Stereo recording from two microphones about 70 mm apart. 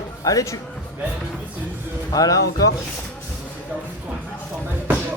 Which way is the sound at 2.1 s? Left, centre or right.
Left.